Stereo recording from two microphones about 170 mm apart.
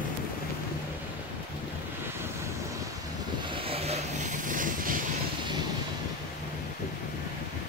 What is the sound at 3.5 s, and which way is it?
Vehicle, 35° right (ahead or behind).